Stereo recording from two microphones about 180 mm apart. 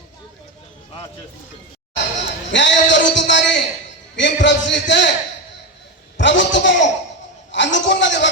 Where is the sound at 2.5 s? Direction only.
85° left.